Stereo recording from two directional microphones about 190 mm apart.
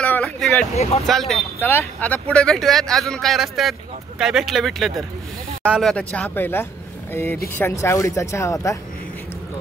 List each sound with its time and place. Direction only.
0.0 s vehicle: 5° left (ahead or behind)
0.7 s speech: 35° left (ahead or behind)
1.0 s speech: centre (ahead or behind)